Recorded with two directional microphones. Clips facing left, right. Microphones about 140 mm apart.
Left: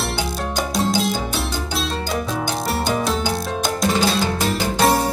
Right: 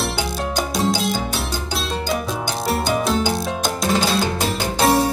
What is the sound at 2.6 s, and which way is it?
Music, centre (ahead or behind).